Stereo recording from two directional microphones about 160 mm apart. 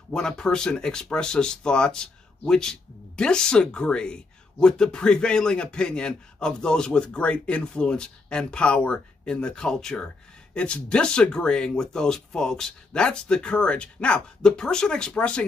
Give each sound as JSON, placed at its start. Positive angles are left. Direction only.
{"t": 0.1, "sound": "speech", "side_deg": 5}